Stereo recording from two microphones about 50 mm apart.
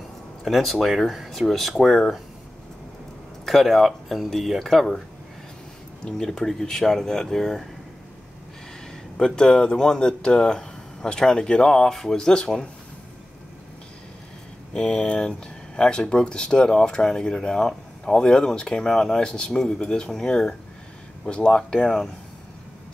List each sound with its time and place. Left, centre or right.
0.4 s speech: centre
3.4 s speech: centre
6.0 s speech: centre
9.1 s speech: centre
14.7 s speech: centre